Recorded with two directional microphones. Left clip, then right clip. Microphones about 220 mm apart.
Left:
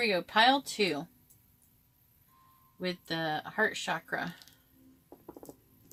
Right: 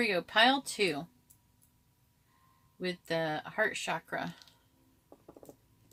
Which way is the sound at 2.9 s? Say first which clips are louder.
Even; 40° right (ahead or behind).